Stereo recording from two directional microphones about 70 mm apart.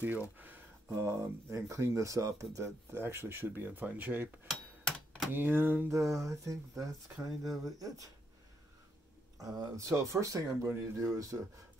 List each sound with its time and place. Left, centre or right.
0.9 s speech: right
3.1 s speech: right
4.5 s a sound: centre
5.3 s speech: right
5.9 s speech: right
7.2 s speech: centre
9.4 s speech: right